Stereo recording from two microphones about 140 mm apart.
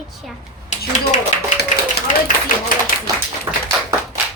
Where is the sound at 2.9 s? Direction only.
75° left (ahead or behind).